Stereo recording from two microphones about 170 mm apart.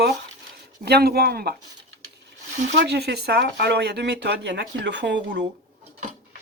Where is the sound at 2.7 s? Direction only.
80° right.